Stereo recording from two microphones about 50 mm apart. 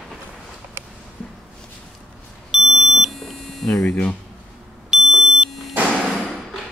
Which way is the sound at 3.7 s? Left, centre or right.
Left.